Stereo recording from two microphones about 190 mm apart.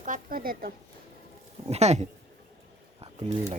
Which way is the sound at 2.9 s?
35° right (ahead or behind).